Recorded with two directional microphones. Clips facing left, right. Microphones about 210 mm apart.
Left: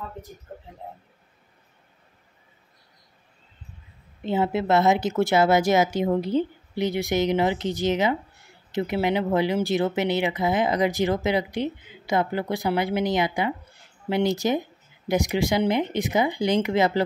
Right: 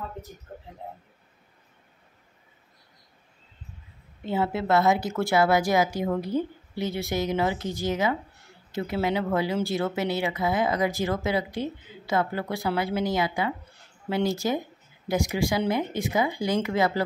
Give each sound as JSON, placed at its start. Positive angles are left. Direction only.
{"t": 4.2, "sound": "speech", "side_deg": 20}